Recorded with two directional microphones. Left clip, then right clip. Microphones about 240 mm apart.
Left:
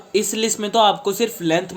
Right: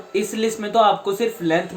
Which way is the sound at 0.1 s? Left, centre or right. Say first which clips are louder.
Left 2 dB; left.